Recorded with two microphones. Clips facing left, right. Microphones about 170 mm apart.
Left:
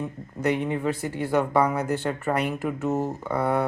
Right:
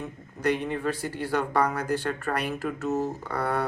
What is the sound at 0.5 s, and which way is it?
Speech, 20° left (ahead or behind).